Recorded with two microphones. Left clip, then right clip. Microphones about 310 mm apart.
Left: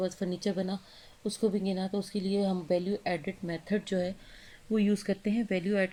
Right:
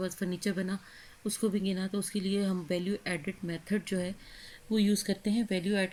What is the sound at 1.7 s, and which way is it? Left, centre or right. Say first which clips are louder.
Speech: left 2 dB; centre.